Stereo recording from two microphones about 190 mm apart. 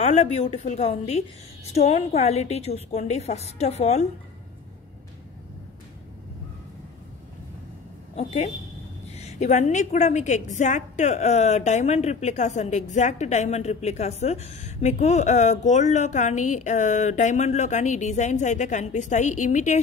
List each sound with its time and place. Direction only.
0.0 s a woman's voice: 35° left (ahead or behind)
8.2 s a woman's voice: 35° left (ahead or behind)